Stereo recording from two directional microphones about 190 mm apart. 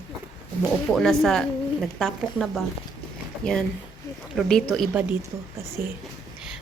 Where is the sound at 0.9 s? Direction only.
Centre (ahead or behind).